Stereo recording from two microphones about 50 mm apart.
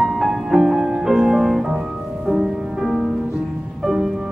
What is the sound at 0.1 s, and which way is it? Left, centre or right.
Music, centre.